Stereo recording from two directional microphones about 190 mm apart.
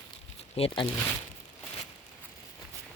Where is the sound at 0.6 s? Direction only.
30° left (ahead or behind).